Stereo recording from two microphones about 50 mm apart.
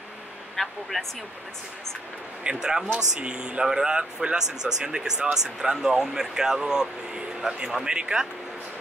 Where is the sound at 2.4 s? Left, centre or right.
Centre.